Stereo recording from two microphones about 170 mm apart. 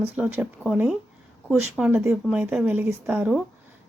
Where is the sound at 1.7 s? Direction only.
5° right (ahead or behind).